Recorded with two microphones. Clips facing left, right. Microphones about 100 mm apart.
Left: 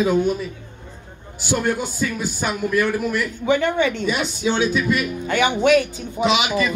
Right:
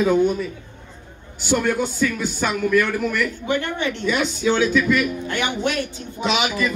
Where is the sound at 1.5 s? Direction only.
20° left (ahead or behind).